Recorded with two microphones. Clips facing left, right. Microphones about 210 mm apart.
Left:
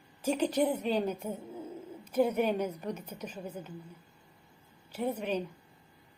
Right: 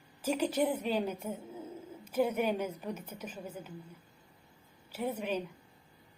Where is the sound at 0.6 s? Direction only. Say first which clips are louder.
Left 2 dB; 5° right (ahead or behind).